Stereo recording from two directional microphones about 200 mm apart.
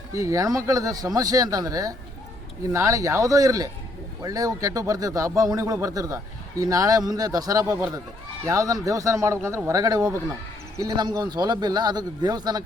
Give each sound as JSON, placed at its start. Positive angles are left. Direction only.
{"t": 0.1, "sound": "speech", "side_deg": -15}